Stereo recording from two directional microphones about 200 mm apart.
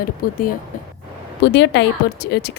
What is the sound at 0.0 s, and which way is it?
Speech, 45° left (ahead or behind).